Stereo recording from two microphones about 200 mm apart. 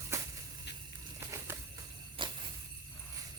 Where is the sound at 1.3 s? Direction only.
15° right (ahead or behind).